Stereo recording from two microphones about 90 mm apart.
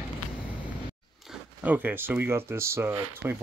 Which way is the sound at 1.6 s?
20° right (ahead or behind).